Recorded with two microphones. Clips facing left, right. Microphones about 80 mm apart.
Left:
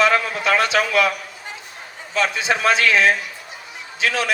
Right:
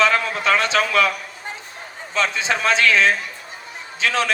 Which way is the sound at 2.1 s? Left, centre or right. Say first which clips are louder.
Left 1 dB; right.